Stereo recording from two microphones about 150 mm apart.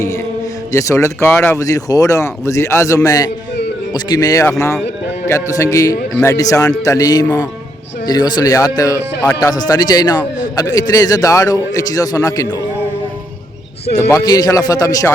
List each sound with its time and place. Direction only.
0.7 s speech: 20° left (ahead or behind)
14.1 s speech: 25° left (ahead or behind)